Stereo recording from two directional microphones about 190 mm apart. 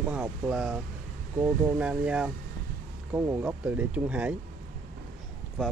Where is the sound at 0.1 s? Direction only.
5° right (ahead or behind).